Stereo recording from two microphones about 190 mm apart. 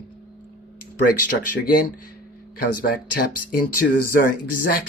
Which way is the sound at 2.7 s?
50° left (ahead or behind).